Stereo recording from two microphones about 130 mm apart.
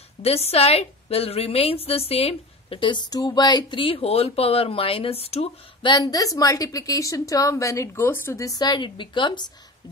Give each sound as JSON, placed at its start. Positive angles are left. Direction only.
{"t": 0.2, "sound": "a woman's voice", "side_deg": 50}
{"t": 5.9, "sound": "a woman's voice", "side_deg": 30}